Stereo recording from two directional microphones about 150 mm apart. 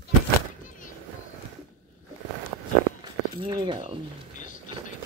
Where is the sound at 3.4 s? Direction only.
35° right (ahead or behind).